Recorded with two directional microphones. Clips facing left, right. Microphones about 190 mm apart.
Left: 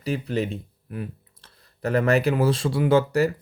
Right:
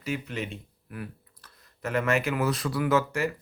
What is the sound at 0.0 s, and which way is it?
Speech, 35° left (ahead or behind).